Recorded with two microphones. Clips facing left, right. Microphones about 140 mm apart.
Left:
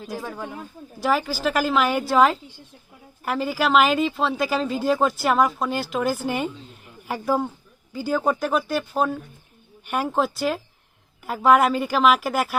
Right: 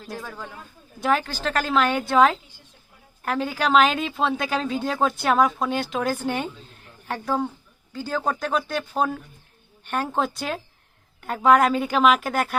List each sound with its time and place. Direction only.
0.2 s speech: 20° left (ahead or behind)
0.9 s speech: 5° left (ahead or behind)